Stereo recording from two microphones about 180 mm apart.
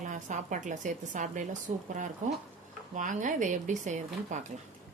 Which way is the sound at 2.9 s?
45° right (ahead or behind).